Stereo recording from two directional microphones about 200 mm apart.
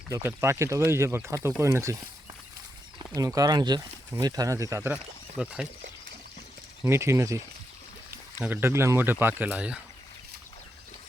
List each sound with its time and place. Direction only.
0.1 s speech: 10° right (ahead or behind)
3.2 s speech: 15° right (ahead or behind)
6.8 s speech: 15° right (ahead or behind)